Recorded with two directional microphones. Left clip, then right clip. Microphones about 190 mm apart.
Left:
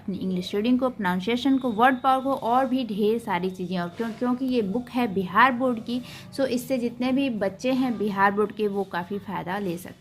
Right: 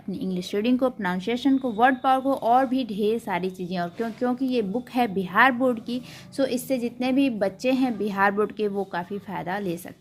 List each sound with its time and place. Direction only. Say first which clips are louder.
0.1 s speech: even; 20° right (ahead or behind)